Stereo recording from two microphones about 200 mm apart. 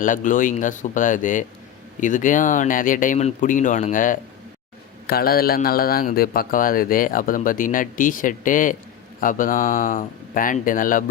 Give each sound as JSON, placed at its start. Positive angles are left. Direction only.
{"t": 0.0, "sound": "a man's voice", "side_deg": 40}